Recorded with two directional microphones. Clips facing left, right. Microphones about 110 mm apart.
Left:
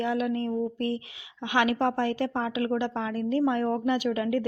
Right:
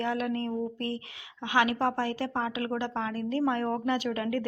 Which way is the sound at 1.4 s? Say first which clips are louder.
Left 1 dB; 30° right (ahead or behind).